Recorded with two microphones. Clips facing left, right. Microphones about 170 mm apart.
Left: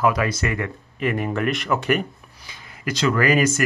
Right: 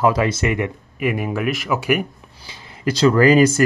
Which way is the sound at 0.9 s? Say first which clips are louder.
Right 1 dB; 10° right (ahead or behind).